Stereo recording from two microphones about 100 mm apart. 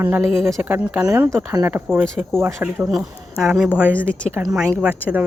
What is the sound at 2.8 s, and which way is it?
Speech, 5° right (ahead or behind).